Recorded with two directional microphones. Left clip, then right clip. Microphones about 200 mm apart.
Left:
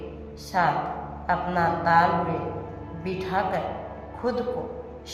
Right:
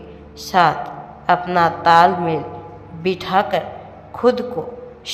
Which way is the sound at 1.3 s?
30° right (ahead or behind).